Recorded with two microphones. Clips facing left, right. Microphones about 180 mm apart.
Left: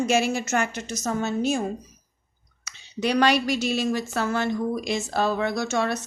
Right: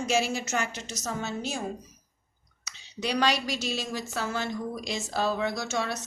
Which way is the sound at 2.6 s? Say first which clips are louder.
Left 7 dB; 55° left (ahead or behind).